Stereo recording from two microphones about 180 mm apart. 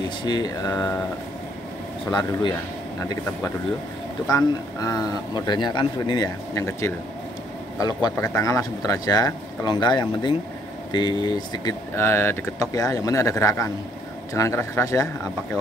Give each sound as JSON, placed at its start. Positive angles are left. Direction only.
{"t": 0.2, "sound": "speech", "side_deg": 25}
{"t": 2.0, "sound": "a man's voice", "side_deg": 25}